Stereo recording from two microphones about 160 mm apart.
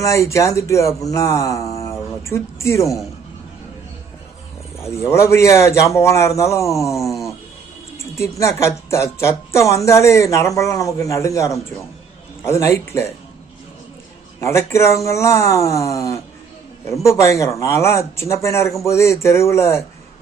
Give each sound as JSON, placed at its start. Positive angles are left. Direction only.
{"t": 0.0, "sound": "music", "side_deg": 20}
{"t": 4.8, "sound": "a woman's voice", "side_deg": 15}
{"t": 7.9, "sound": "a woman's voice", "side_deg": 15}
{"t": 14.4, "sound": "a woman's voice", "side_deg": 15}